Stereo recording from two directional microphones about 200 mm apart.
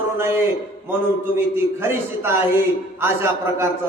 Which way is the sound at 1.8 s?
10° right (ahead or behind).